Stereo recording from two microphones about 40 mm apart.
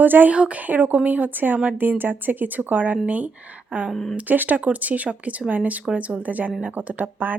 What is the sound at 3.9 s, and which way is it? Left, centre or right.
Speech, centre.